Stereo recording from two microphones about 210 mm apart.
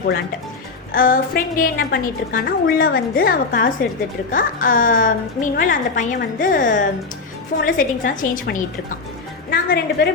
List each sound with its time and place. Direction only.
0.9 s a woman's voice: 40° left (ahead or behind)